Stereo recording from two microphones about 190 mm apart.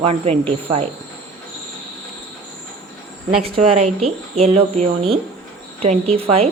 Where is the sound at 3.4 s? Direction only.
30° right (ahead or behind).